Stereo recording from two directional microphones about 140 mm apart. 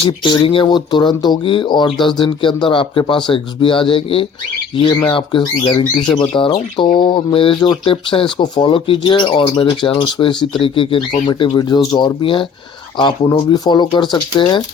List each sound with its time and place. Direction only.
0.0 s speech: 40° left (ahead or behind)
13.5 s speech: 30° left (ahead or behind)